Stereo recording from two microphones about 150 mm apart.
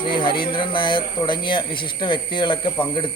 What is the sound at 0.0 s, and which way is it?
A man's voice, 35° left (ahead or behind).